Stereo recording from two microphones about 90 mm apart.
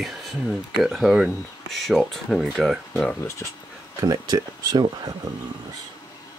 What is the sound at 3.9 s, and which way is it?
Speech, 50° right (ahead or behind).